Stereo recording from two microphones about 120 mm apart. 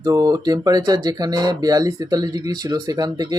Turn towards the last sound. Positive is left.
turn(degrees=-30)  # may be behind; listen again after turning